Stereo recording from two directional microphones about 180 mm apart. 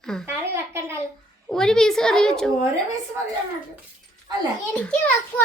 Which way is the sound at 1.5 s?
5° left (ahead or behind).